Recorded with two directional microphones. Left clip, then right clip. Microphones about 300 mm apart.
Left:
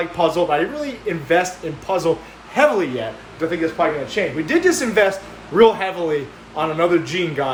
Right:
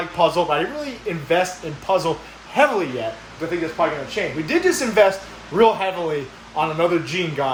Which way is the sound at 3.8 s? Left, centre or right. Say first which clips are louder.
Left 1 dB; centre.